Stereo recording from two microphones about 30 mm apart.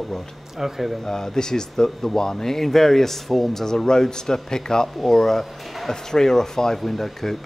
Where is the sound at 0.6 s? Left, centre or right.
Centre.